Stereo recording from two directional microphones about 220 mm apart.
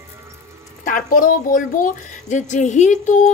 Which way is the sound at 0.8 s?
40° left (ahead or behind).